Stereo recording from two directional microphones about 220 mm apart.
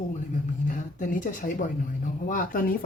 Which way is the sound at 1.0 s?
35° left (ahead or behind).